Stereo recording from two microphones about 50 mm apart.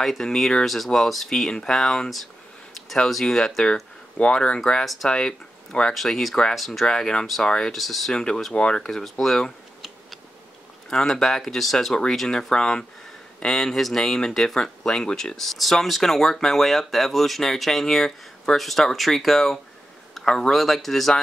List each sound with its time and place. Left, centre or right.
0.0 s speech: centre
4.8 s speech: centre
5.1 s speech: centre
5.9 s speech: centre
6.9 s speech: centre
7.7 s speech: centre
8.1 s speech: centre
9.2 s speech: centre
10.9 s speech: centre